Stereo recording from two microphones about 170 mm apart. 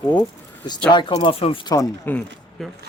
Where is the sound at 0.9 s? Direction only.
30° left (ahead or behind).